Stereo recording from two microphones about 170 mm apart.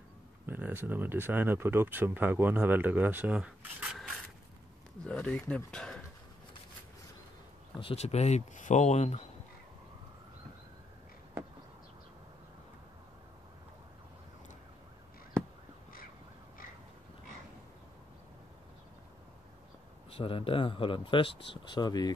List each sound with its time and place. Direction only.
0.5 s speech: 10° right (ahead or behind)
5.0 s speech: 5° left (ahead or behind)
7.8 s speech: 40° left (ahead or behind)
20.1 s speech: 35° left (ahead or behind)